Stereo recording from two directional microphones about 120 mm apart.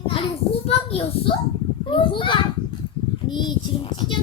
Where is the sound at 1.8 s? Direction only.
45° left (ahead or behind).